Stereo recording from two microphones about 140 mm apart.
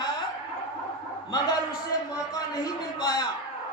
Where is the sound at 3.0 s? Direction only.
30° left (ahead or behind).